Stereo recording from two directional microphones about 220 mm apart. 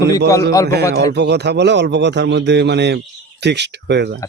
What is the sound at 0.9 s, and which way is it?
A man's voice, 50° right (ahead or behind).